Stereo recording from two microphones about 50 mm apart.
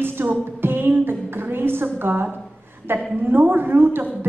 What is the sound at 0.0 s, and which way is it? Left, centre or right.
Music, right.